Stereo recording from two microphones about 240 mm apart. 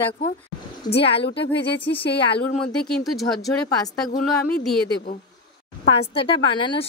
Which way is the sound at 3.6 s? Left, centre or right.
Centre.